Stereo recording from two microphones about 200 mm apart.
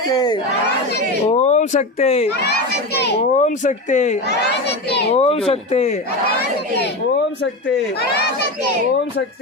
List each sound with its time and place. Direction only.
0.1 s battle cry: 20° left (ahead or behind)
1.3 s speech: 35° left (ahead or behind)
2.3 s speech: 55° left (ahead or behind)
3.2 s speech: 35° left (ahead or behind)
4.3 s a child's voice: 55° left (ahead or behind)
5.1 s speech: 30° left (ahead or behind)